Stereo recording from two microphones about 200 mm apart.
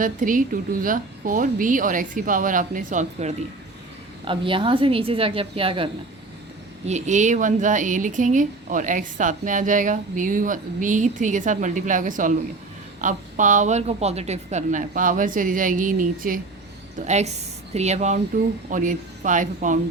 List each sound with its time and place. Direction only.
0.0 s a woman's voice: 40° right (ahead or behind)
4.3 s a woman's voice: 25° right (ahead or behind)